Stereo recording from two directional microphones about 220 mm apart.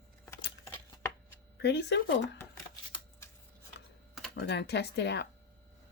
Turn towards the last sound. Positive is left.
turn(degrees=50)  # may be behind; listen again after turning